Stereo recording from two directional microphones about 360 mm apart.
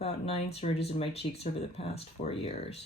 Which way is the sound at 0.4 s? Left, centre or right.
Centre.